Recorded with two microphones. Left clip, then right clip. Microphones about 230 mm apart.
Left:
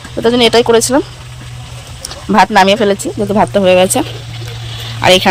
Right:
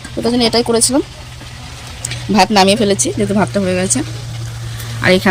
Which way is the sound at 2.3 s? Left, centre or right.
Left.